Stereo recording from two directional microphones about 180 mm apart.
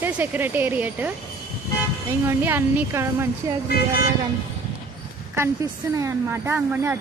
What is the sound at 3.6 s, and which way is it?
Speech, 55° left (ahead or behind).